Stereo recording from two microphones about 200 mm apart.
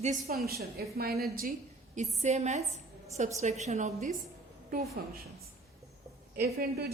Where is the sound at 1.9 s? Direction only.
35° right (ahead or behind).